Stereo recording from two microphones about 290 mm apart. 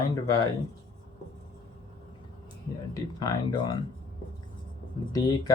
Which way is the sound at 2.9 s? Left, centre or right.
Centre.